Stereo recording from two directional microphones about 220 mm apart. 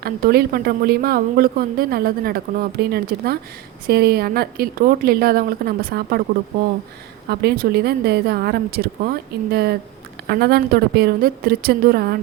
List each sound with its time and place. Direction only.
0.0 s speech: 45° right (ahead or behind)
7.3 s speech: 45° right (ahead or behind)